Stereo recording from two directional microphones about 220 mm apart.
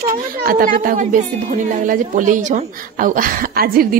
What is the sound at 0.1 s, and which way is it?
Speech, 40° right (ahead or behind).